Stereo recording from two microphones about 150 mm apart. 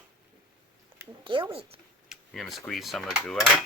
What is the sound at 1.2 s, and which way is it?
Speech, 35° right (ahead or behind).